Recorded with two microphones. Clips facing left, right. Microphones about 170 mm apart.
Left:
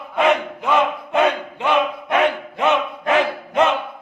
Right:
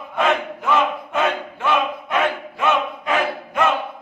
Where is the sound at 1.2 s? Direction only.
20° left (ahead or behind).